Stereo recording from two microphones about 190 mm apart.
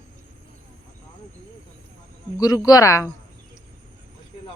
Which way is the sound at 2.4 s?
20° left (ahead or behind).